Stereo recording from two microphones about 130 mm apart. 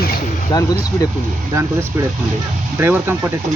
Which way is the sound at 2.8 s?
15° right (ahead or behind).